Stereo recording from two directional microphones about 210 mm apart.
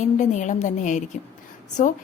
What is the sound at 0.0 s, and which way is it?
A woman's voice, 35° left (ahead or behind).